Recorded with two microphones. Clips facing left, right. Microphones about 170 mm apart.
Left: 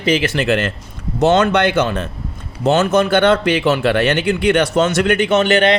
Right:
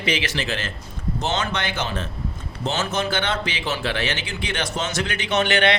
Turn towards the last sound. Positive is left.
turn(degrees=45)  # may be behind; listen again after turning